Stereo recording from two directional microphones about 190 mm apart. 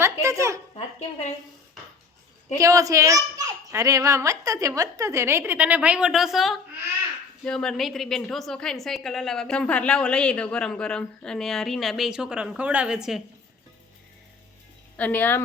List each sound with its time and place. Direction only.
0.0 s a sound: 15° right (ahead or behind)
2.6 s a child's voice: 15° right (ahead or behind)
14.9 s speech: 10° left (ahead or behind)